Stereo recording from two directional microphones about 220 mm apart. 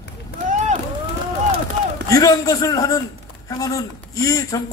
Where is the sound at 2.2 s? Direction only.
15° left (ahead or behind).